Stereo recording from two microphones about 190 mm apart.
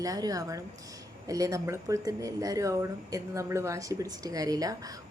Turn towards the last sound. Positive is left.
turn(degrees=-20)  # may be behind; listen again after turning